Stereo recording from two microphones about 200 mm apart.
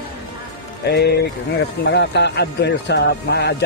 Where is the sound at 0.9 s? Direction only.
55° left (ahead or behind).